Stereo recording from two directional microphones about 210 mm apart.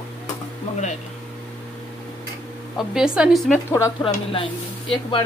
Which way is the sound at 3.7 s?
20° left (ahead or behind).